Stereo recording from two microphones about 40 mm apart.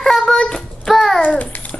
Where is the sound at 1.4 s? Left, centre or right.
Left.